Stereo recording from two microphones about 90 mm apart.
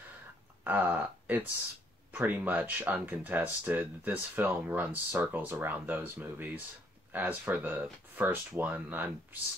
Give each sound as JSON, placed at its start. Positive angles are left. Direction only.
{"t": 0.7, "sound": "speech", "side_deg": -20}